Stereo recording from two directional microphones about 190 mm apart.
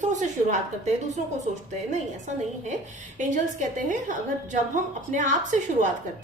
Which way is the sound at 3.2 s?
40° right (ahead or behind).